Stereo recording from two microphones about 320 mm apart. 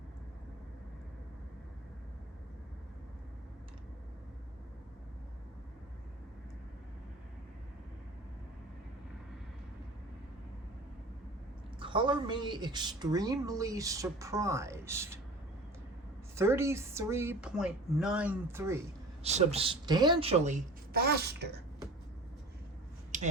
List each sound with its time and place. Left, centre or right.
11.8 s a woman's voice: centre
16.3 s a woman's voice: centre
19.2 s a woman's voice: centre
23.1 s a sound: right